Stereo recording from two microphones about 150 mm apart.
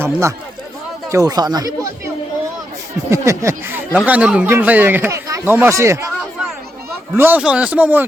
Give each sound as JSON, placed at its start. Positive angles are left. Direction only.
{"t": 0.0, "sound": "speech", "side_deg": -20}
{"t": 3.1, "sound": "speech", "side_deg": -20}
{"t": 7.2, "sound": "speech", "side_deg": -10}